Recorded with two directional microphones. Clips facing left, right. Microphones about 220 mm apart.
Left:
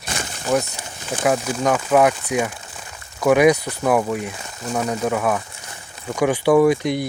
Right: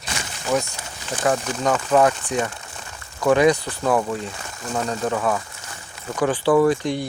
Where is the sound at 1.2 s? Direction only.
10° left (ahead or behind).